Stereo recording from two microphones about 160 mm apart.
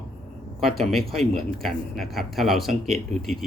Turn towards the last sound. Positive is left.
turn(degrees=0)  # may be behind; listen again after turning